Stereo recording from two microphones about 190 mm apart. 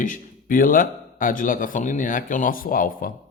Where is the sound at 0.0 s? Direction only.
45° left (ahead or behind).